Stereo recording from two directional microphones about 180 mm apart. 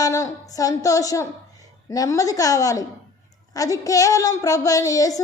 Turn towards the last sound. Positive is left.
turn(degrees=20)  # may be behind; listen again after turning